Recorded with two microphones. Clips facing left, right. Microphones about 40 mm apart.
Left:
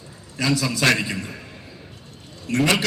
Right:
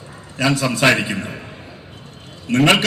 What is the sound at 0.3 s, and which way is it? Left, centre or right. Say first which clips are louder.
A man's voice: right 4 dB; right.